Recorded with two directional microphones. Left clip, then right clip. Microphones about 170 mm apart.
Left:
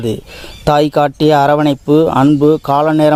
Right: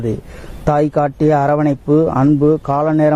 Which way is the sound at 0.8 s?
25° left (ahead or behind).